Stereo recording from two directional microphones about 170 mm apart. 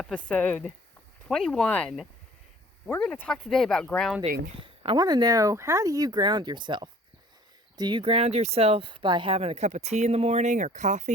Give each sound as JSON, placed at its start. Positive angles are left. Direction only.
{"t": 0.0, "sound": "speech", "side_deg": 5}
{"t": 4.6, "sound": "speech", "side_deg": -30}